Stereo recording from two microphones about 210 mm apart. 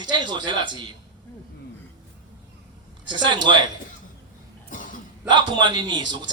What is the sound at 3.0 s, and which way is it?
Speech, 20° right (ahead or behind).